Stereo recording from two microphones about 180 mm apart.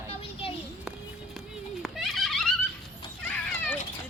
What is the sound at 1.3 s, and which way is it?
Horse, centre (ahead or behind).